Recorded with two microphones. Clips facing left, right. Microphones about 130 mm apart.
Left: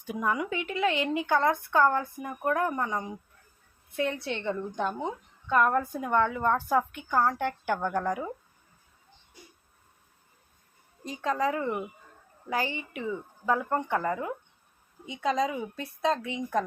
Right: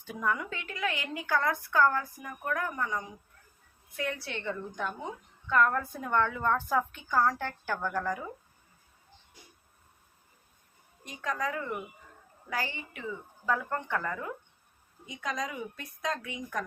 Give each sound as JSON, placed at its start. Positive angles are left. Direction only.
{"t": 0.0, "sound": "a woman's voice", "side_deg": 15}
{"t": 11.0, "sound": "speech", "side_deg": 30}